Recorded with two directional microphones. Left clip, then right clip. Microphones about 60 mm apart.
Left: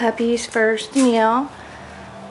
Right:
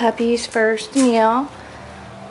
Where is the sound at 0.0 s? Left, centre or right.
Centre.